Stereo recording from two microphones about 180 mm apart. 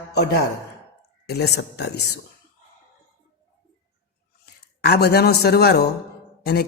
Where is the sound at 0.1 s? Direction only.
65° left (ahead or behind).